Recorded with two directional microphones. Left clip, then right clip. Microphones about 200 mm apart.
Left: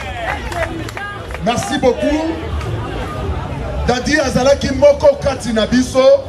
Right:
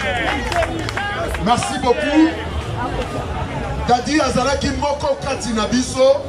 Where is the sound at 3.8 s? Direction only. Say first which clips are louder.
Left 1 dB; 30° left (ahead or behind).